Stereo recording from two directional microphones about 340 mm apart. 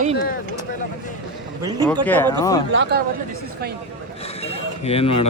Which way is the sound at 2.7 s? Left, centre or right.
Right.